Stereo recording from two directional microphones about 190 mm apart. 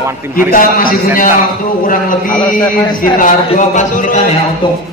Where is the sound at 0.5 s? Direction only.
50° left (ahead or behind).